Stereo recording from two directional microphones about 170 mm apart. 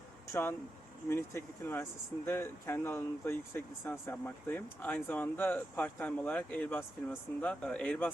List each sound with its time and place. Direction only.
1.1 s speech: 15° left (ahead or behind)